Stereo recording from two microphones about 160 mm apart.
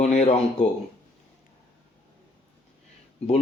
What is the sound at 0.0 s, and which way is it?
Speech, 45° left (ahead or behind).